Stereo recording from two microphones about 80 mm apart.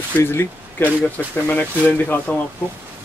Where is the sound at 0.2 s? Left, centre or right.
Left.